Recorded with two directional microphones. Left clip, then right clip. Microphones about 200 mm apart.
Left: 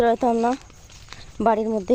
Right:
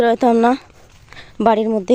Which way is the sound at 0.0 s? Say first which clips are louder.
Right 4 dB; 25° right (ahead or behind).